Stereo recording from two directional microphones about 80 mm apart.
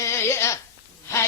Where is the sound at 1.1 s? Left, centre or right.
Left.